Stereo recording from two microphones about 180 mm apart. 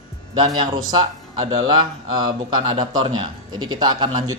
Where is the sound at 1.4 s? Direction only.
25° right (ahead or behind).